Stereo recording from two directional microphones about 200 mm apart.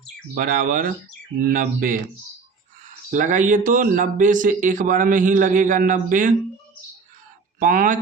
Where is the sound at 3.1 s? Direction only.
40° right (ahead or behind).